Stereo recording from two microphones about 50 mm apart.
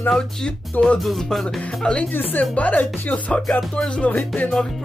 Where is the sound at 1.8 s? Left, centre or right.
Centre.